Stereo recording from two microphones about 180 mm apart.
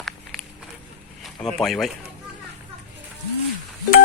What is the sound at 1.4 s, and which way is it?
Speech, centre (ahead or behind).